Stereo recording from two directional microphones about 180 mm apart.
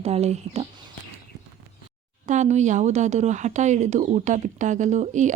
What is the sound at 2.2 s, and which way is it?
Speech, 40° right (ahead or behind).